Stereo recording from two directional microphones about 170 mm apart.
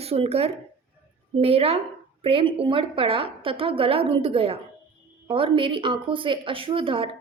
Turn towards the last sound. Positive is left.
turn(degrees=-30)  # may be behind; listen again after turning